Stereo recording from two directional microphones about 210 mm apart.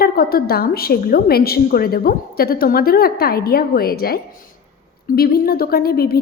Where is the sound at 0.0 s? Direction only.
45° left (ahead or behind).